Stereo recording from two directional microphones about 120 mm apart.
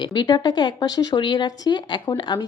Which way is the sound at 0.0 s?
35° left (ahead or behind).